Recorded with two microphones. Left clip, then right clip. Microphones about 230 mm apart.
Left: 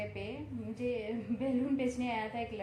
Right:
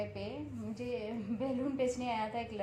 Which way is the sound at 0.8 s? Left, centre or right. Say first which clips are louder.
Left 3 dB; right.